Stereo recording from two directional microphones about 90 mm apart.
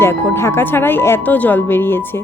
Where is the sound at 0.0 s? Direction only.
25° left (ahead or behind).